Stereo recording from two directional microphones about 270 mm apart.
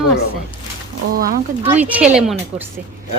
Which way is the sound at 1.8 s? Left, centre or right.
Centre.